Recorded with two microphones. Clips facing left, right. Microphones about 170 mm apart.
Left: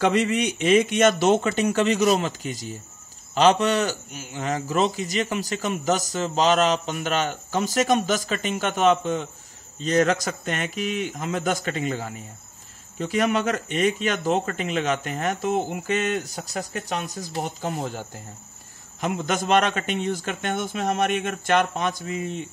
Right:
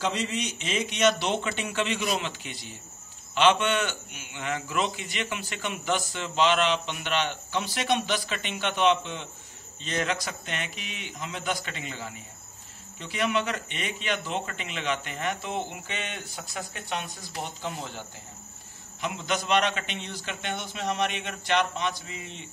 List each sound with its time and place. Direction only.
0.0 s a man's voice: 60° left (ahead or behind)